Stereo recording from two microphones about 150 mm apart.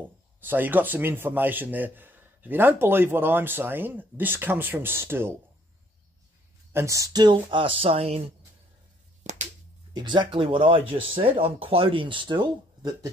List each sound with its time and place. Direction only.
0.4 s a man's voice: 15° right (ahead or behind)
6.7 s speech: 20° right (ahead or behind); by 8.2 s 40° right (ahead or behind)
9.2 s a sound: 50° right (ahead or behind)
9.9 s speech: 30° right (ahead or behind)